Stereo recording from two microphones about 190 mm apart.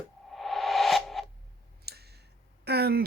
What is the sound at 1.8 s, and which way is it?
Clicking, 55° right (ahead or behind).